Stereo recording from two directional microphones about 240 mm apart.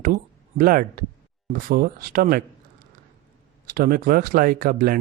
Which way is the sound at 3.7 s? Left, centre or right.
Right.